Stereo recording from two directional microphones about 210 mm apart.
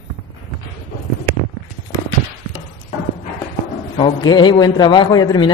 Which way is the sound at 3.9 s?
20° left (ahead or behind).